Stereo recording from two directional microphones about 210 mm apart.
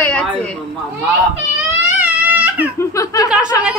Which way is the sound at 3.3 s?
5° right (ahead or behind).